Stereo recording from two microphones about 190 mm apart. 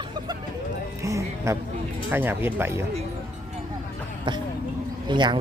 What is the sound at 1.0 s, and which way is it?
Music, 15° right (ahead or behind).